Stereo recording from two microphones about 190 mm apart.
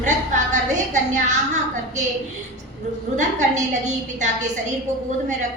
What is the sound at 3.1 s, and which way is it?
A woman's voice, 40° right (ahead or behind).